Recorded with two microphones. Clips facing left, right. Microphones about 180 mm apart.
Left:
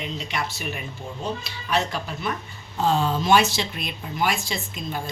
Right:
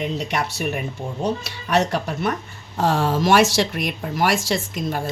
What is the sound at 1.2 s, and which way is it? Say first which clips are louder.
A woman's voice: right 4 dB; 70° right (ahead or behind).